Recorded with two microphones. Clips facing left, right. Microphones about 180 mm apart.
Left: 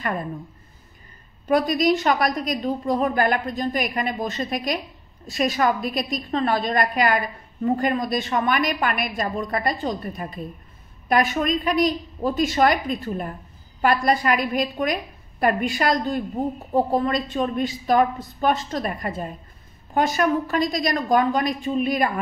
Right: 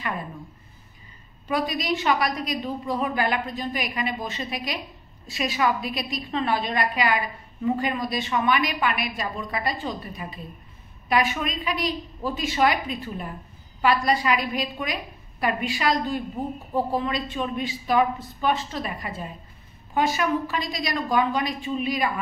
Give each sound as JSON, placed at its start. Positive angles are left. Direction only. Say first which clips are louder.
{"t": 1.5, "sound": "a woman's voice", "louder": "left 7 dB", "side_deg": 45}